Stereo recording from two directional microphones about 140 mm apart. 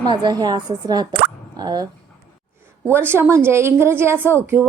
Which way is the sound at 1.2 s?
30° right (ahead or behind).